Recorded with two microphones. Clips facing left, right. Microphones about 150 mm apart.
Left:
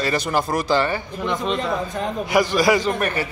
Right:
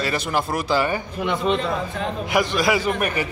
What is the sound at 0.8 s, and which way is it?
Speech, 15° right (ahead or behind).